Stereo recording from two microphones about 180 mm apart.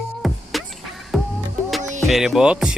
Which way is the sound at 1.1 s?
Centre (ahead or behind).